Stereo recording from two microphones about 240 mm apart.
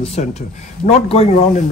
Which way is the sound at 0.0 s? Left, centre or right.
Left.